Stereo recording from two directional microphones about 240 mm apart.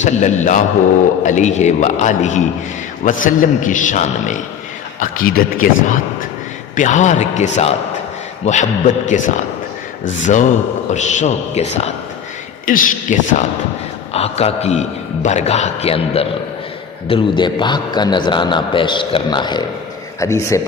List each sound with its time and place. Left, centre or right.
0.0 s a man's voice: left; by 20.6 s centre